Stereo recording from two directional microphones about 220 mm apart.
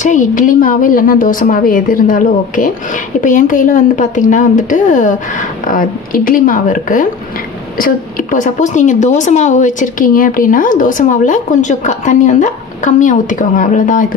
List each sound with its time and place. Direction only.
0.0 s a woman's voice: 35° left (ahead or behind)